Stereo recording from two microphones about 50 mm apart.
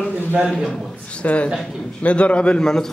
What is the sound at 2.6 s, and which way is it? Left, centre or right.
Speech, centre.